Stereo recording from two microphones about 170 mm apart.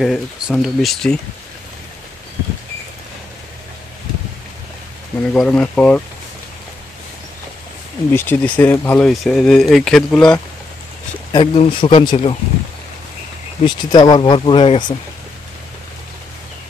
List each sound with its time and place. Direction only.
0.0 s speech: centre (ahead or behind)
5.3 s speech: 10° left (ahead or behind)
8.1 s speech: 10° left (ahead or behind)
11.3 s speech: 35° left (ahead or behind)
13.7 s speech: 25° left (ahead or behind)